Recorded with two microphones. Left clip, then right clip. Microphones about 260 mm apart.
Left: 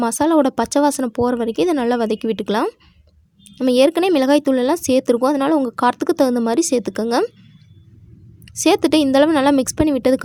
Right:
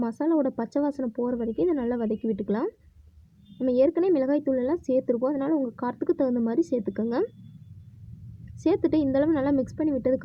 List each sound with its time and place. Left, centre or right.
0.0 s speech: left
8.6 s speech: left